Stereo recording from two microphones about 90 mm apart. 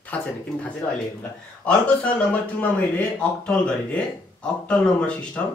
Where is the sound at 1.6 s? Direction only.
15° left (ahead or behind).